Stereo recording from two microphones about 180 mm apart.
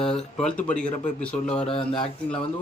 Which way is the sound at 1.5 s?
30° left (ahead or behind).